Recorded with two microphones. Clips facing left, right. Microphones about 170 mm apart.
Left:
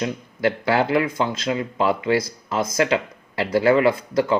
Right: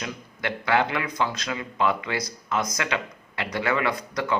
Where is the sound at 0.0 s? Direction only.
30° left (ahead or behind).